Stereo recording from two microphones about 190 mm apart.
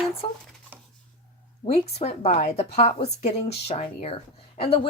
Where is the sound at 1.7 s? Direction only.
35° left (ahead or behind).